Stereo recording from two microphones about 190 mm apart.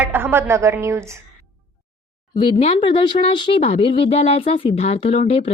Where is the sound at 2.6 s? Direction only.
30° left (ahead or behind).